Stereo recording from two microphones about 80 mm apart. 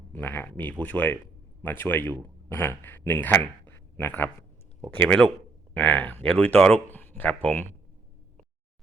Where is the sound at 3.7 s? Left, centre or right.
Left.